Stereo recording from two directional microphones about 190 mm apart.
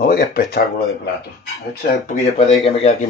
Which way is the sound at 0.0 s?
50° left (ahead or behind).